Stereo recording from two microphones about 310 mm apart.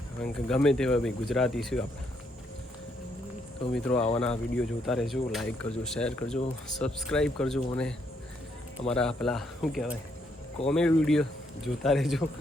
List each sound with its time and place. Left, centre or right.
0.3 s speech: centre
3.7 s speech: centre